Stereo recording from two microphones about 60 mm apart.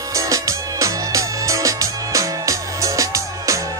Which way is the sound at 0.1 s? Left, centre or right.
Right.